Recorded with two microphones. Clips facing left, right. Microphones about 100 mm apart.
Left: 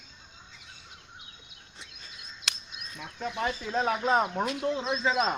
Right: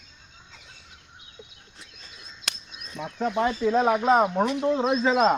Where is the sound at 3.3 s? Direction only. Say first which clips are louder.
Right 9 dB; 50° right (ahead or behind).